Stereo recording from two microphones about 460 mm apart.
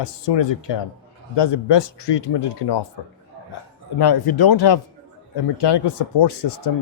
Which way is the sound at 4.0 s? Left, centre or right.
Left.